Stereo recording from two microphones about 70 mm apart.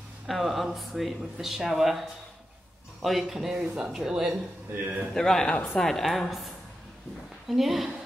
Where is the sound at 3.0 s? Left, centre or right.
Centre.